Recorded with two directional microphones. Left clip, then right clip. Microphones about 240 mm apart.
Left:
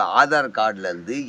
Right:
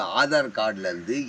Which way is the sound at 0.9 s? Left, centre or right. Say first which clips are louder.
Left 1 dB; centre.